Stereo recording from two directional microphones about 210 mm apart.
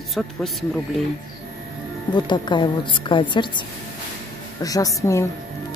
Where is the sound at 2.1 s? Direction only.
20° left (ahead or behind).